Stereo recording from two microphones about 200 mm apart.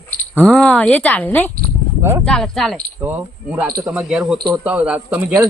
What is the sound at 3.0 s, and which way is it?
A man's voice, 10° right (ahead or behind).